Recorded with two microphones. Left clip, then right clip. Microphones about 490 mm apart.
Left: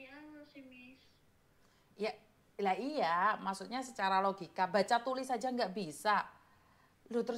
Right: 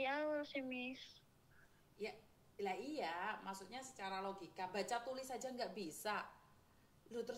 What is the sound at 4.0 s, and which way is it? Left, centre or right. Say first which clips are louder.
A woman's voice: left 14 dB; left.